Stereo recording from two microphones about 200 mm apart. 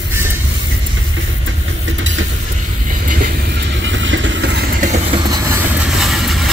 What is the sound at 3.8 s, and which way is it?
Vehicle, 70° right (ahead or behind).